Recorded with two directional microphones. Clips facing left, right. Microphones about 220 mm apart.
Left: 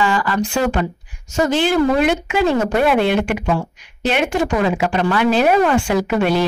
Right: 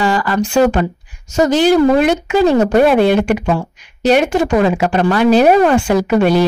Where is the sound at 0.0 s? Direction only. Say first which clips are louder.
Right 3 dB; 40° right (ahead or behind).